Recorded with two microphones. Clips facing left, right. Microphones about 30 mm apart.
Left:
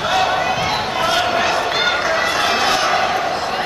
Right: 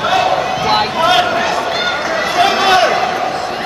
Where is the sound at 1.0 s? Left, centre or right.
Centre.